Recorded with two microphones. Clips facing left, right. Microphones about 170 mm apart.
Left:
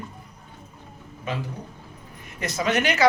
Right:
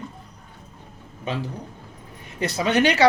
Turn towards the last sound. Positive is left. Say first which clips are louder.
# right 3 dB
turn(degrees=-30)  # may be behind; listen again after turning